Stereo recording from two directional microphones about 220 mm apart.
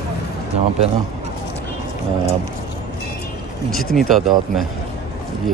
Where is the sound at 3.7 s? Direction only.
Centre (ahead or behind).